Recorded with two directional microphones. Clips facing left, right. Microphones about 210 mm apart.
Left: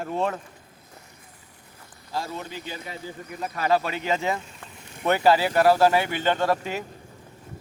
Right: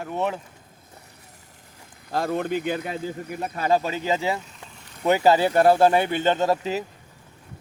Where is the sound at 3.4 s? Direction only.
30° right (ahead or behind).